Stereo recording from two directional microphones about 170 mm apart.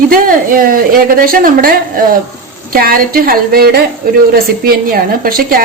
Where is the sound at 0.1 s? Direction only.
55° right (ahead or behind).